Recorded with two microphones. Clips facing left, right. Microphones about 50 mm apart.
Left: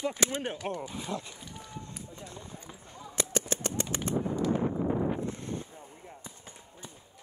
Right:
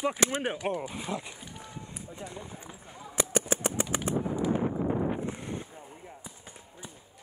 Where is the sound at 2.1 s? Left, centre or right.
Centre.